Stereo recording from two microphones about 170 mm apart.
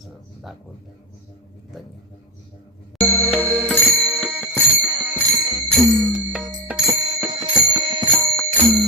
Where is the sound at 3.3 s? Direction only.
10° right (ahead or behind).